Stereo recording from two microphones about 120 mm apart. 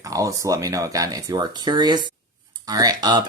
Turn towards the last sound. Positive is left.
turn(degrees=-35)  # may be behind; listen again after turning